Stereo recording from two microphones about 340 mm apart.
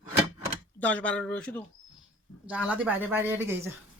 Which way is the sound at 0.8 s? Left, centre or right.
Centre.